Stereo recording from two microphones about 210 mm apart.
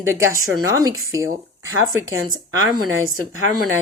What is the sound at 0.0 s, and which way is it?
Speech, 15° right (ahead or behind).